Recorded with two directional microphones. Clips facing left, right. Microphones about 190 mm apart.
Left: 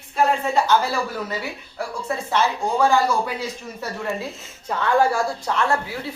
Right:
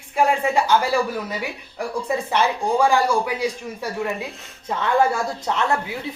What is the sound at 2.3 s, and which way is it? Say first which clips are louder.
Speech: even; 15° right (ahead or behind).